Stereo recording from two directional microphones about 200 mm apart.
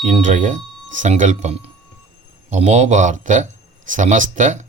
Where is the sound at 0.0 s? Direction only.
40° right (ahead or behind).